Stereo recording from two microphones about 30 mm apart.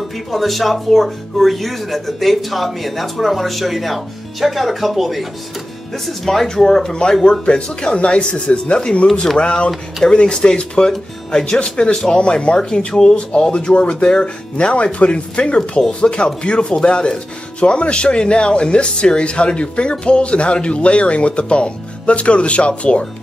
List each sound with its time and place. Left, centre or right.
0.3 s speech: centre
6.0 s speech: centre
6.4 s speech: centre
7.2 s speech: left
10.0 s speech: left
15.0 s speech: left